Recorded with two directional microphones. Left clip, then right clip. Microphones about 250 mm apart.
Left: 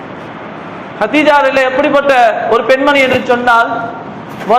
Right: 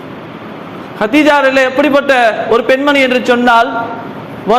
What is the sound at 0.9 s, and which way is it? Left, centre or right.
A man's voice, right.